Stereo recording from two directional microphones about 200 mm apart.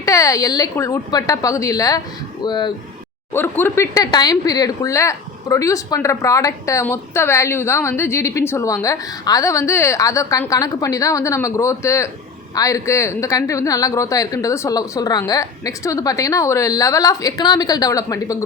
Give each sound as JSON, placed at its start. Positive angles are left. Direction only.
{"t": 0.0, "sound": "speech", "side_deg": 15}
{"t": 3.3, "sound": "speech", "side_deg": 10}